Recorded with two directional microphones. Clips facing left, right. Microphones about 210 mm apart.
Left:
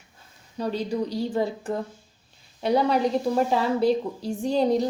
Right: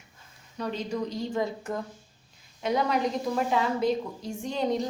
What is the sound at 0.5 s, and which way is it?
A woman's voice, 30° left (ahead or behind).